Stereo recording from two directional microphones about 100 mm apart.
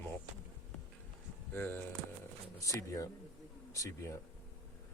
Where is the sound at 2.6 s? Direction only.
35° left (ahead or behind).